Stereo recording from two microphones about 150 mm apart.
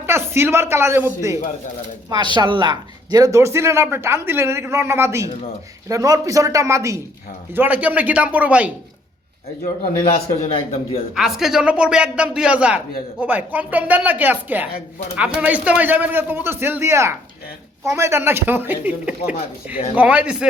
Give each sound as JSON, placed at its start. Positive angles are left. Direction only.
{"t": 0.0, "sound": "a man's voice", "side_deg": -15}
{"t": 2.0, "sound": "a man's voice", "side_deg": -30}
{"t": 10.5, "sound": "a man's voice", "side_deg": 40}
{"t": 11.1, "sound": "a man's voice", "side_deg": -5}